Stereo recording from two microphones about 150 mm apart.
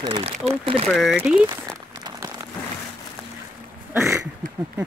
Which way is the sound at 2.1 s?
25° right (ahead or behind).